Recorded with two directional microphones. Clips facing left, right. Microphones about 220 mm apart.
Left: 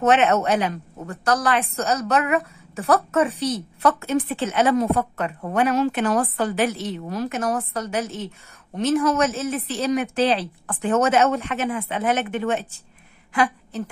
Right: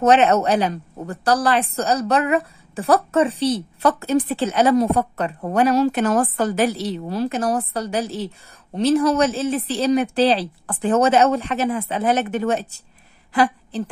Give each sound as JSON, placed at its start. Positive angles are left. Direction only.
{"t": 0.0, "sound": "a woman's voice", "side_deg": -35}